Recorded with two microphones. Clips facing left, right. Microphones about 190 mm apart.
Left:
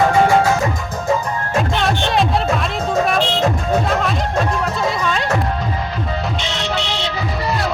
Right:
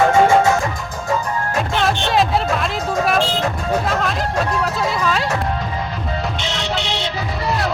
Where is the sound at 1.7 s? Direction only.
Centre (ahead or behind).